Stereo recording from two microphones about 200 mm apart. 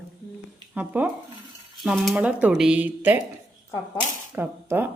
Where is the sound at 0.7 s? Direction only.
10° right (ahead or behind).